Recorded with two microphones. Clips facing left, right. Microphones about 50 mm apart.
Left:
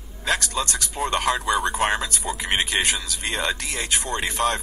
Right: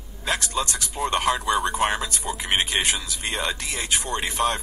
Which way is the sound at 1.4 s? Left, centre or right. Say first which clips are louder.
Even; right.